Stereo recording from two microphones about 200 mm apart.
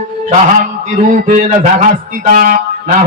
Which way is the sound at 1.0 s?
40° right (ahead or behind).